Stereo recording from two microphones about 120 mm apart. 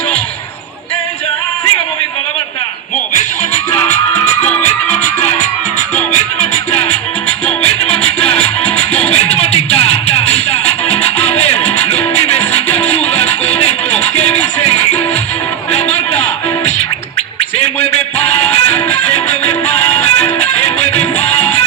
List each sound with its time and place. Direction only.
3.2 s music: 65° left (ahead or behind)
5.2 s music: 70° left (ahead or behind)
8.3 s music: 60° left (ahead or behind)
18.5 s music: 55° left (ahead or behind)
19.6 s music: 15° left (ahead or behind)
20.4 s music: 60° left (ahead or behind)